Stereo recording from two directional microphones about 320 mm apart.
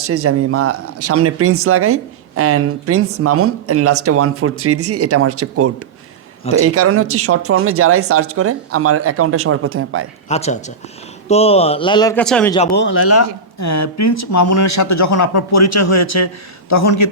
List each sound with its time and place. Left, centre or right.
0.0 s speech: right
10.2 s a man's voice: centre
12.7 s speech: left